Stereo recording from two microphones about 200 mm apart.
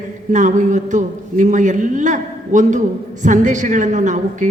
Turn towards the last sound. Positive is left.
turn(degrees=-40)  # may be behind; listen again after turning